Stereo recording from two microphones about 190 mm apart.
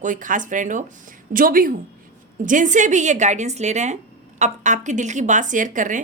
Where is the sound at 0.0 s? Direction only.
45° right (ahead or behind).